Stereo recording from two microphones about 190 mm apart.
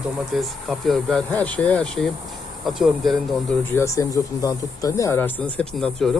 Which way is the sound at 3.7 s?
15° left (ahead or behind).